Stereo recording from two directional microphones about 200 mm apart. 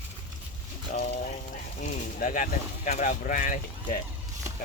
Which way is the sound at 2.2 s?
40° left (ahead or behind).